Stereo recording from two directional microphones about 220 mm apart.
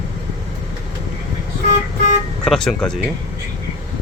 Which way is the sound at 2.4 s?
5° left (ahead or behind).